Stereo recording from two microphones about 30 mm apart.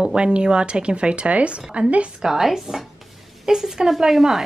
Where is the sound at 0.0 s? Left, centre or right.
Right.